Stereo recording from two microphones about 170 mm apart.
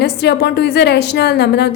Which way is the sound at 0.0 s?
75° left (ahead or behind).